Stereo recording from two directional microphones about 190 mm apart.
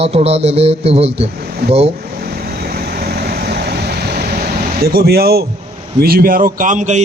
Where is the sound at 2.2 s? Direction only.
55° right (ahead or behind).